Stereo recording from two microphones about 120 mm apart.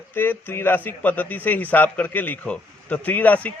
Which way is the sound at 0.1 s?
15° left (ahead or behind).